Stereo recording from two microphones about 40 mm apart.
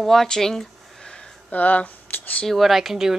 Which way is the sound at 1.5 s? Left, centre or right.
Left.